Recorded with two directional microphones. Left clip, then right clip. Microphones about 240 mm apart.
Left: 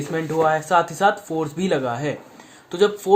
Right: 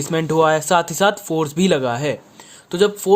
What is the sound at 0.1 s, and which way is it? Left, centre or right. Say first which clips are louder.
Speech: right 4 dB; right.